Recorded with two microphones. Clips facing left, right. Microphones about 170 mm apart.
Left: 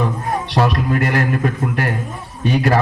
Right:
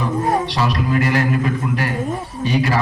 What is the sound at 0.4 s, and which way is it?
A man's voice, 55° left (ahead or behind).